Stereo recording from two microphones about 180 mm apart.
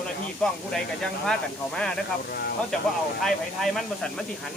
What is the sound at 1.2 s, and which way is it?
Speech, 5° left (ahead or behind).